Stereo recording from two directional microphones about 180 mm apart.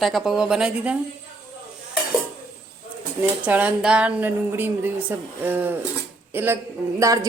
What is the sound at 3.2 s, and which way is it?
Speech, 10° right (ahead or behind).